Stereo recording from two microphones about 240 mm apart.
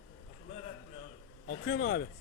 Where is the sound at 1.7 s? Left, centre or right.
Left.